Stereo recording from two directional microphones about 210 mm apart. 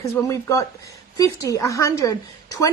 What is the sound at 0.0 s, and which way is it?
A woman's voice, 15° left (ahead or behind).